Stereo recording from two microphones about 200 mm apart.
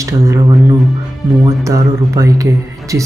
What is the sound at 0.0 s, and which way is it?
Speech, 15° right (ahead or behind).